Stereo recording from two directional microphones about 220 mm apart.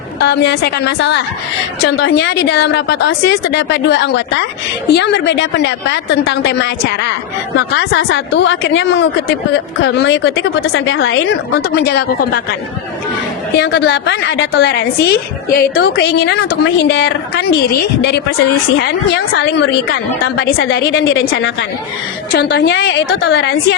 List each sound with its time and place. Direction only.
0.2 s a woman's voice: 50° left (ahead or behind)
13.6 s a woman's voice: 50° left (ahead or behind)